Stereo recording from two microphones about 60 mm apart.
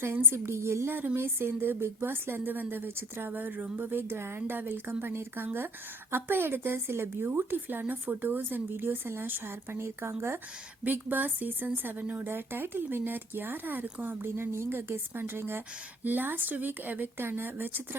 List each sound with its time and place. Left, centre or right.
0.0 s a woman's voice: right
0.9 s a woman's voice: right
4.0 s a woman's voice: right
4.4 s a woman's voice: right
10.8 s a woman's voice: right
12.3 s a woman's voice: right